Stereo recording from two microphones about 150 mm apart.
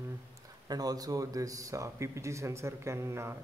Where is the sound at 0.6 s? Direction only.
25° right (ahead or behind).